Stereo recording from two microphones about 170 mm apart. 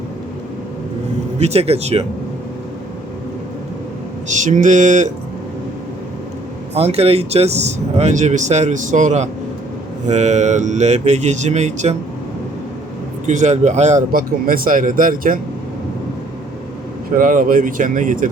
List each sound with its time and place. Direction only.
1.4 s speech: 40° right (ahead or behind)
4.3 s speech: 45° right (ahead or behind)
6.7 s speech: 35° right (ahead or behind)
13.2 s speech: 45° right (ahead or behind)
17.2 s speech: 50° right (ahead or behind)